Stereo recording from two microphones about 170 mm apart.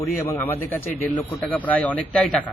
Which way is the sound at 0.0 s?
15° left (ahead or behind).